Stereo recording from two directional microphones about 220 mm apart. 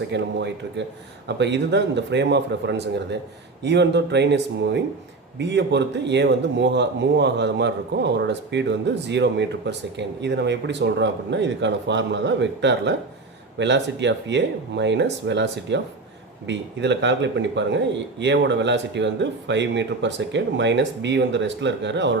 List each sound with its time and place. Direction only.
0.1 s speech: 50° right (ahead or behind)